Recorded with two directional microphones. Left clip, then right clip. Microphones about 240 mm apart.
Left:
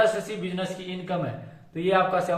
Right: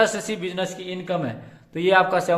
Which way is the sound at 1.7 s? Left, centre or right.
Right.